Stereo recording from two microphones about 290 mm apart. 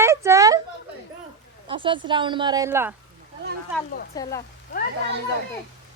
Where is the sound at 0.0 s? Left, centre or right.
Centre.